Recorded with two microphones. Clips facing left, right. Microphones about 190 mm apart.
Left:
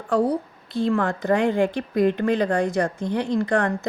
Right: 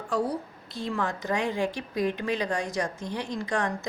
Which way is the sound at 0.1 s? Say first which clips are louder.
Left 7 dB; 55° left (ahead or behind).